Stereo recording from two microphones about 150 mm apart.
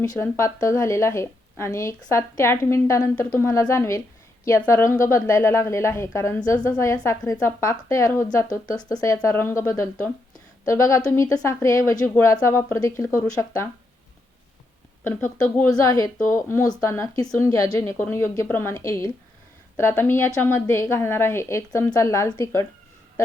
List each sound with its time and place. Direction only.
0.0 s a woman's voice: 20° left (ahead or behind)
15.0 s a woman's voice: 15° left (ahead or behind)